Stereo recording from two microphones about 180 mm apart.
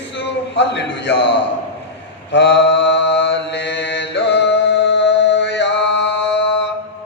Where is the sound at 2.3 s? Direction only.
80° left.